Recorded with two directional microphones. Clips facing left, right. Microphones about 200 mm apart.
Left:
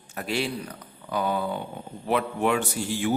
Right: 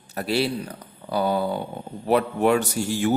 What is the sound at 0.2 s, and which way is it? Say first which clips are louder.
A man's voice: right 5 dB; 35° right (ahead or behind).